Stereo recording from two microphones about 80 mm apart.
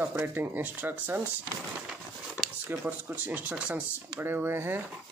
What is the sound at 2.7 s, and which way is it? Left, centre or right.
Speech, right.